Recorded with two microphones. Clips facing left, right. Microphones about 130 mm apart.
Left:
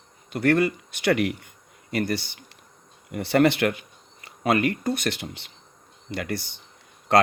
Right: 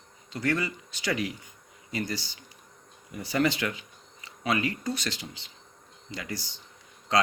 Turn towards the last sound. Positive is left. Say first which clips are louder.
# left 6 dB
turn(degrees=60)  # may be behind; listen again after turning